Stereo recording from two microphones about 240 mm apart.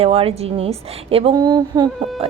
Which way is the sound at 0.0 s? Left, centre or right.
Right.